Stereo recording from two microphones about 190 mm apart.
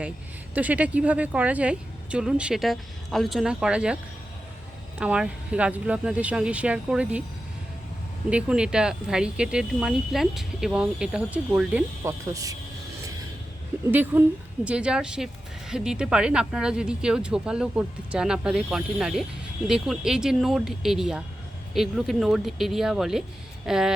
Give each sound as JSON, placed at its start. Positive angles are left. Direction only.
{"t": 0.5, "sound": "speech", "side_deg": -10}
{"t": 4.9, "sound": "speech", "side_deg": -5}
{"t": 8.3, "sound": "speech", "side_deg": -5}
{"t": 12.0, "sound": "speech", "side_deg": -15}
{"t": 13.9, "sound": "speech", "side_deg": -10}